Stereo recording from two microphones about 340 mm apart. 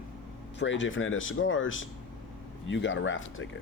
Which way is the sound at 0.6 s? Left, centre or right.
Left.